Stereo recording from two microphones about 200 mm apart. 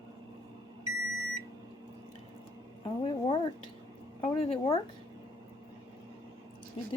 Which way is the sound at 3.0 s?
25° left (ahead or behind).